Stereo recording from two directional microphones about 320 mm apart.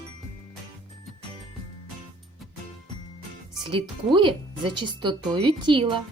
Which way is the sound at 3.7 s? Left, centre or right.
Centre.